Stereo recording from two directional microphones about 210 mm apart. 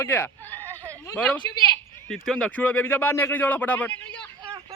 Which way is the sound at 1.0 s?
5° left (ahead or behind).